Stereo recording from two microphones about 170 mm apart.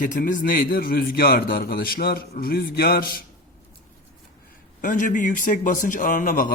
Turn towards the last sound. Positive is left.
turn(degrees=55)  # may be behind; listen again after turning